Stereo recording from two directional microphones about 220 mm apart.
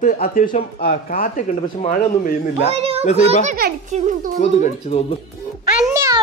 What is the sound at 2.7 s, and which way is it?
Children playing, 25° right (ahead or behind).